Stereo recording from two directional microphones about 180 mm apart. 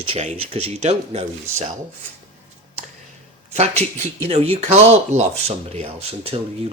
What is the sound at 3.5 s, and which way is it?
Speech, 35° right (ahead or behind).